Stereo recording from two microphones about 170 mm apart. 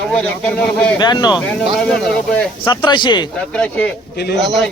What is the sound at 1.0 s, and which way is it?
Speech, 25° left (ahead or behind).